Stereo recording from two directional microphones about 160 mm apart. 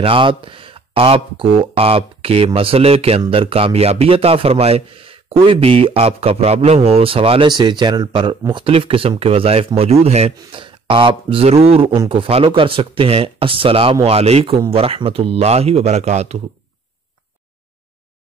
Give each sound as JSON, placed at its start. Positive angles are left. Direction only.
{"t": 0.0, "sound": "speech", "side_deg": -35}